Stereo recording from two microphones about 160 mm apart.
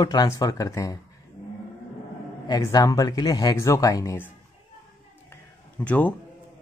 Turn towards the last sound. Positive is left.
turn(degrees=10)  # may be behind; listen again after turning